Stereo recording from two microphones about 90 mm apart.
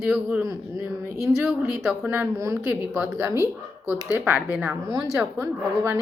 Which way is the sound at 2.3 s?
30° right (ahead or behind).